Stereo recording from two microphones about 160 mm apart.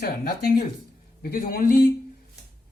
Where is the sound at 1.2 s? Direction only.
65° left (ahead or behind).